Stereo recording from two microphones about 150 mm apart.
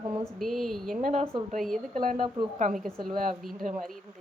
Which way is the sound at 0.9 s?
60° right (ahead or behind).